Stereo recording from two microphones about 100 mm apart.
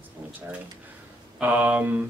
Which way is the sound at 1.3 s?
15° right (ahead or behind).